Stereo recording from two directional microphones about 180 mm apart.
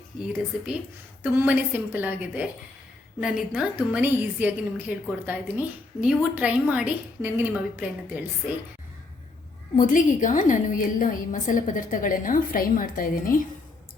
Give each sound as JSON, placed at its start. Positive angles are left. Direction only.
{"t": 1.2, "sound": "a woman's voice", "side_deg": -10}
{"t": 9.7, "sound": "a woman's voice", "side_deg": 45}